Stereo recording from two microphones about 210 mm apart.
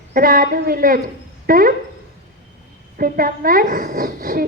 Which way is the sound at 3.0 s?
45° right (ahead or behind).